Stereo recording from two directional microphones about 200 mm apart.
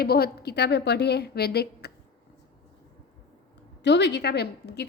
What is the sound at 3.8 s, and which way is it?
A woman's voice, 60° left (ahead or behind).